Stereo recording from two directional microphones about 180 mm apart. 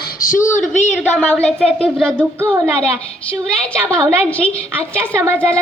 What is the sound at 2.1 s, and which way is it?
Speech, 10° right (ahead or behind).